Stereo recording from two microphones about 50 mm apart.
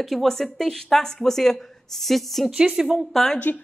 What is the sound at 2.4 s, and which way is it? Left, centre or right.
Speech, centre.